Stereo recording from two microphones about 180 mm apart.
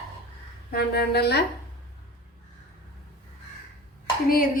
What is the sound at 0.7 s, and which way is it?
Speech, 60° left (ahead or behind).